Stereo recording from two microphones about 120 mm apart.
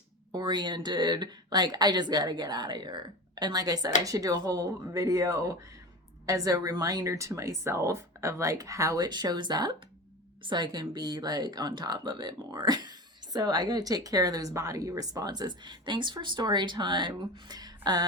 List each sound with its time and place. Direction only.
0.3 s speech: 35° right (ahead or behind)